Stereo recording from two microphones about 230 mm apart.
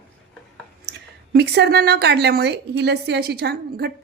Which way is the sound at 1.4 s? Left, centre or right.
Right.